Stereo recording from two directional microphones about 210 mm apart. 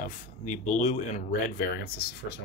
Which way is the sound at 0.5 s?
35° left (ahead or behind).